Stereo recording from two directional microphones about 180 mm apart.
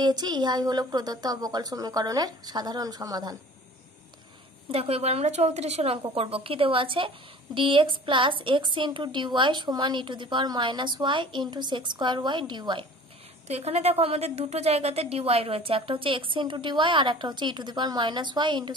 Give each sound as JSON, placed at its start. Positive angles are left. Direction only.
{"t": 0.0, "sound": "a woman's voice", "side_deg": -25}
{"t": 4.6, "sound": "a woman's voice", "side_deg": -35}
{"t": 13.5, "sound": "a woman's voice", "side_deg": -35}